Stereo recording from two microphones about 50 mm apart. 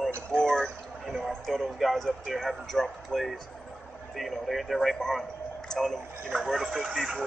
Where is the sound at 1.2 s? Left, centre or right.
Centre.